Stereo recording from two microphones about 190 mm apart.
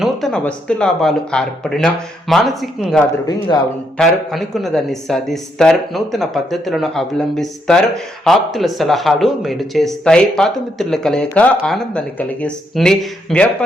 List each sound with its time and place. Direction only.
0.0 s speech: centre (ahead or behind)
3.0 s speech: 20° left (ahead or behind)
3.9 s speech: centre (ahead or behind)